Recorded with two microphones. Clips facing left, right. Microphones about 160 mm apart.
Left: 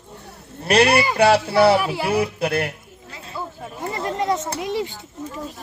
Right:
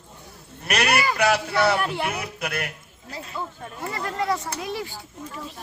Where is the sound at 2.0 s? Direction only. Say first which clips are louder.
Left 9 dB; 30° left (ahead or behind).